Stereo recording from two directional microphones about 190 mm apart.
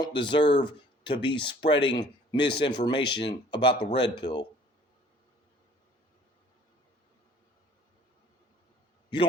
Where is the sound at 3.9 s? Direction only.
65° left (ahead or behind).